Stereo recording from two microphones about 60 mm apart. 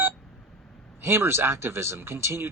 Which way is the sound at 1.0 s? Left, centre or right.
Right.